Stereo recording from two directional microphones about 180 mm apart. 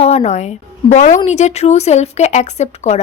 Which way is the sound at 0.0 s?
35° left (ahead or behind).